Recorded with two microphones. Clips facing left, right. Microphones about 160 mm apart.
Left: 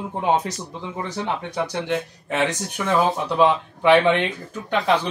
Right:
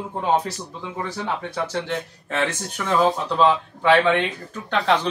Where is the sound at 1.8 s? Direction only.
15° left (ahead or behind).